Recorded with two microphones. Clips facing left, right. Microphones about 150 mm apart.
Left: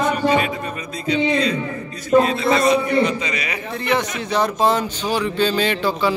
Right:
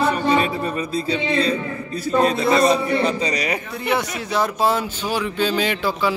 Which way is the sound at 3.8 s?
5° right (ahead or behind).